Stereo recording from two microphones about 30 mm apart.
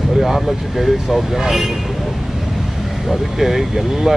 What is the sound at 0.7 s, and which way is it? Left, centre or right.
Speech, centre.